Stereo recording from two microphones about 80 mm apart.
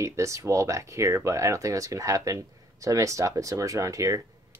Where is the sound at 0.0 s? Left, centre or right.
Right.